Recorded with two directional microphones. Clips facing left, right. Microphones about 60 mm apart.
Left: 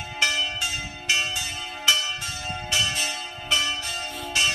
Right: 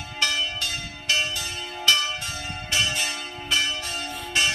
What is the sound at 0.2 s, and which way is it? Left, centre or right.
Church bell, centre.